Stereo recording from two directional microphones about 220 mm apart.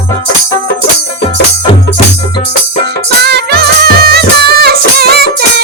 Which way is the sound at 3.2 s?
45° right (ahead or behind).